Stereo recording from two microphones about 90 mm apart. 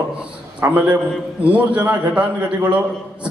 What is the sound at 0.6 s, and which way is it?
A man's voice, 15° right (ahead or behind).